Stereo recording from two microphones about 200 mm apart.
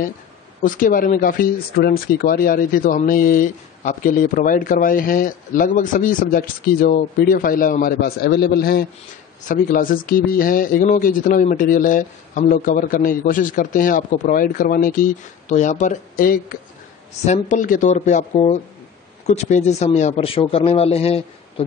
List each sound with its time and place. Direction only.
0.6 s speech: 40° left (ahead or behind)